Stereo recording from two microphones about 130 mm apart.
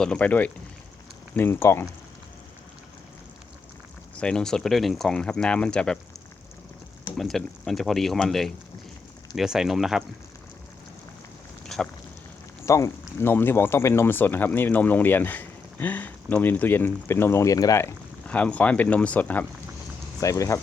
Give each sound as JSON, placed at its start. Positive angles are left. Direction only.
{"t": 0.0, "sound": "speech", "side_deg": 10}
{"t": 4.2, "sound": "speech", "side_deg": 5}
{"t": 7.2, "sound": "speech", "side_deg": 0}
{"t": 11.6, "sound": "a sound", "side_deg": 5}
{"t": 12.6, "sound": "speech", "side_deg": 25}
{"t": 18.3, "sound": "speech", "side_deg": 10}
{"t": 20.1, "sound": "speech", "side_deg": 25}